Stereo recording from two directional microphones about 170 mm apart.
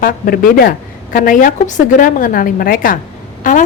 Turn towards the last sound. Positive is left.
turn(degrees=50)  # may be behind; listen again after turning